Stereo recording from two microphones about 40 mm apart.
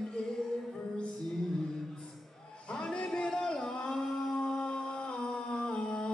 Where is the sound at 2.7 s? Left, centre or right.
Left.